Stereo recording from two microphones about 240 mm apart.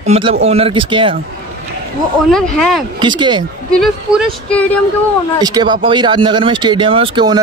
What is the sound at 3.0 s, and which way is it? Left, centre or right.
Speech, centre.